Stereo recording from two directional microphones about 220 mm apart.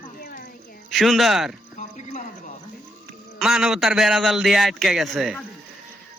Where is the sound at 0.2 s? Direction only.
40° left (ahead or behind).